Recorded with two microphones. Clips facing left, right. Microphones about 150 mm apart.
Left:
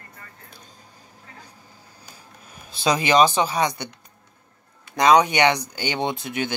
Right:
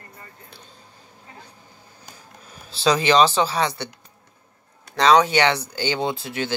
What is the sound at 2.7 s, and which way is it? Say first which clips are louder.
Speech: right 2 dB; 15° left (ahead or behind).